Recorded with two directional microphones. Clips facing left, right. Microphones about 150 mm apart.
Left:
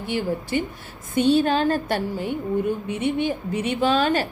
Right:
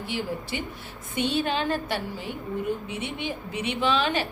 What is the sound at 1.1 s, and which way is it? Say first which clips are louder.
A woman's voice: left 8 dB; 40° left (ahead or behind).